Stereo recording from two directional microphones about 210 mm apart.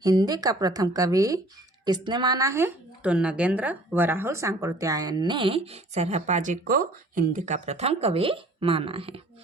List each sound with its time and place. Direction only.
0.0 s a woman's voice: 15° right (ahead or behind)